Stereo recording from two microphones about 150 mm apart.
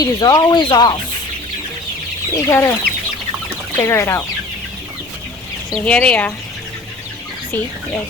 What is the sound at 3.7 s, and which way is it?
Speech, 20° left (ahead or behind).